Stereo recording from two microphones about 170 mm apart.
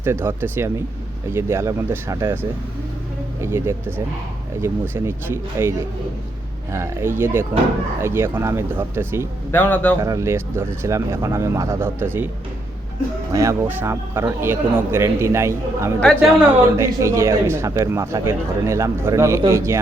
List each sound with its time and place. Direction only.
0.0 s speech: 15° right (ahead or behind)
9.5 s a man's voice: 10° left (ahead or behind)
10.0 s speech: 20° right (ahead or behind)
13.3 s speech: 15° right (ahead or behind)
16.0 s a woman's voice: 5° left (ahead or behind)
16.4 s speech: 15° right (ahead or behind)